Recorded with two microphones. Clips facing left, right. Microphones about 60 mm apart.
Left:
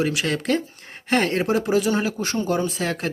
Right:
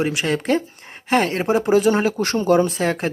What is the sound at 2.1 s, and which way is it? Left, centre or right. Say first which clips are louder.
Speech: right 5 dB; right.